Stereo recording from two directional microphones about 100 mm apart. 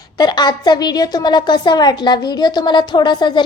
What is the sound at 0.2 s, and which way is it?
A woman's voice, 45° left (ahead or behind).